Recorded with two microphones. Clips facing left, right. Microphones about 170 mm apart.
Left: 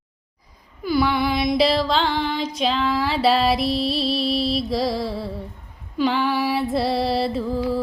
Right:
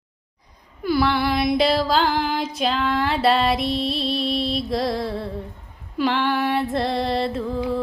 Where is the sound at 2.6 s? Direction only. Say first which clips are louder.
Left 1 dB; centre (ahead or behind).